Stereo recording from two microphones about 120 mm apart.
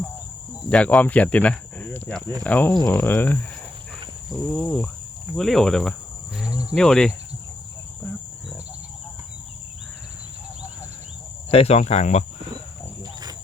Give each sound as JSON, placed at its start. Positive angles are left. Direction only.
{"t": 0.7, "sound": "speech", "side_deg": 10}
{"t": 4.3, "sound": "cricket", "side_deg": 0}
{"t": 6.3, "sound": "cricket", "side_deg": -5}
{"t": 6.7, "sound": "cricket", "side_deg": 5}
{"t": 11.5, "sound": "speech", "side_deg": 60}
{"t": 12.5, "sound": "wild animals", "side_deg": -35}